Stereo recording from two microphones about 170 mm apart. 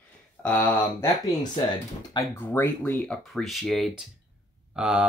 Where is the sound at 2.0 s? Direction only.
15° left (ahead or behind).